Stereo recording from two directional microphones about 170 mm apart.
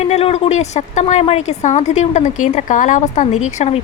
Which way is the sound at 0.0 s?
35° left (ahead or behind).